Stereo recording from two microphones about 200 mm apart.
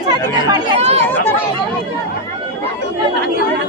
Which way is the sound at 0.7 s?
30° right (ahead or behind).